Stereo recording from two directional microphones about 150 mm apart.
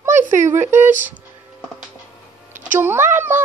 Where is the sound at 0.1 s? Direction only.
55° right (ahead or behind).